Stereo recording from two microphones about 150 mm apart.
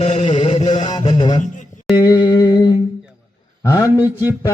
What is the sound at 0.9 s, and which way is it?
Music, 30° left (ahead or behind).